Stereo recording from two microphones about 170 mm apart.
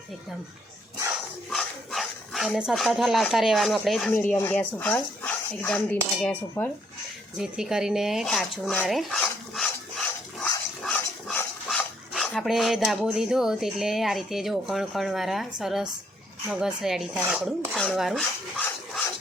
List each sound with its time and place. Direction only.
1.5 s speech: centre (ahead or behind)
4.1 s speech: 10° left (ahead or behind)
7.3 s dishes: 5° right (ahead or behind)
9.6 s stir: centre (ahead or behind)
10.8 s speech: 5° left (ahead or behind)
16.5 s dishes: 5° right (ahead or behind)